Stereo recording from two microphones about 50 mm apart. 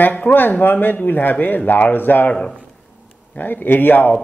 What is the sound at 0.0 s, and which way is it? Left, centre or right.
A man's voice, left.